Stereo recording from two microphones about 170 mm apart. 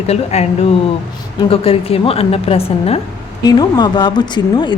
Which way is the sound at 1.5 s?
35° left (ahead or behind).